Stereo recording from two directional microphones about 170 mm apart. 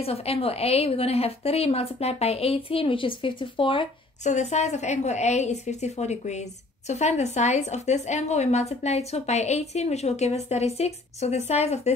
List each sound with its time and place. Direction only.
0.0 s a woman's voice: 35° left (ahead or behind)
4.2 s a woman's voice: 45° left (ahead or behind)